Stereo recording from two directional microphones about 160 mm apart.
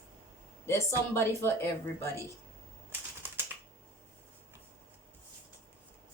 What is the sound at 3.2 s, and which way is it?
Typing, 15° right (ahead or behind).